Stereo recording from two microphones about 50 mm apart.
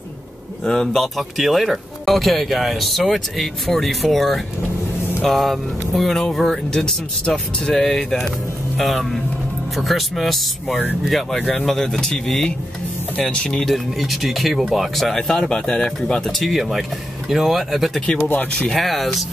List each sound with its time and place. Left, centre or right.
0.7 s speech: centre
13.2 s speech: centre
13.7 s speech: centre